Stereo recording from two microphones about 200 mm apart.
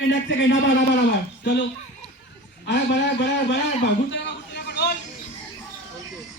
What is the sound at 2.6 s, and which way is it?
A man's voice, 60° left (ahead or behind).